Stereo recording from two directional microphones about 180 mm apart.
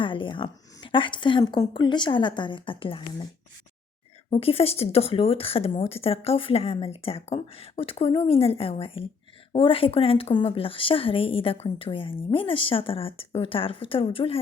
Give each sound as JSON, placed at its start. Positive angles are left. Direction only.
{"t": 0.0, "sound": "a woman's voice", "side_deg": 30}
{"t": 4.3, "sound": "speech", "side_deg": 30}